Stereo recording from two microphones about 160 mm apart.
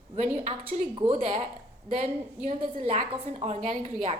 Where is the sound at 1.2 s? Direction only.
45° right (ahead or behind).